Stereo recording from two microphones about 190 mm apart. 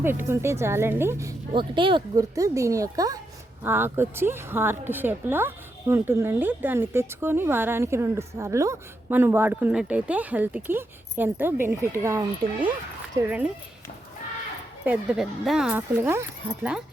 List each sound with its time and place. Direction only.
0.0 s a woman's voice: 10° right (ahead or behind)
12.4 s a woman's voice: centre (ahead or behind)
14.8 s a woman's voice: 5° right (ahead or behind)